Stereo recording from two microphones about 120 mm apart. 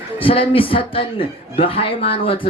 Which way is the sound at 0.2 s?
50° left (ahead or behind).